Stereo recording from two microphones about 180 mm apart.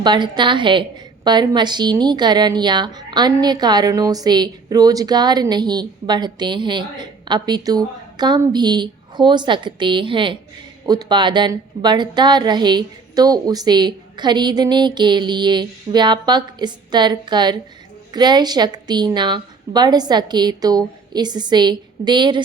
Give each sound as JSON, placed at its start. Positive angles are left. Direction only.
{"t": 0.0, "sound": "a woman's voice", "side_deg": -25}